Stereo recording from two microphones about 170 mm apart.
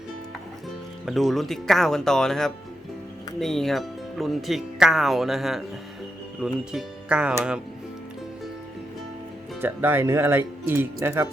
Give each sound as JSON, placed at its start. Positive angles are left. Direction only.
{"t": 1.0, "sound": "speech", "side_deg": 0}
{"t": 9.6, "sound": "speech", "side_deg": -10}